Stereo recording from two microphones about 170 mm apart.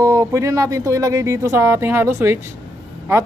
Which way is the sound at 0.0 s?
20° right (ahead or behind).